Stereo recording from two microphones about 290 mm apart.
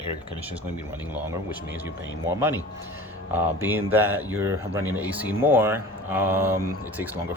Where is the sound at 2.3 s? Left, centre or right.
Centre.